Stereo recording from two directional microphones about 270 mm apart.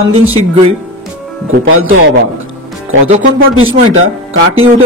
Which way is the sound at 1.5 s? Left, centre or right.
Right.